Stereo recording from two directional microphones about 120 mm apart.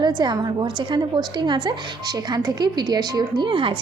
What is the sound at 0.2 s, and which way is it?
A woman's voice, 35° right (ahead or behind).